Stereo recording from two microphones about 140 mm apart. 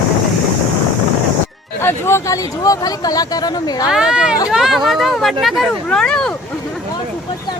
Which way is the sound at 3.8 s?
5° right (ahead or behind).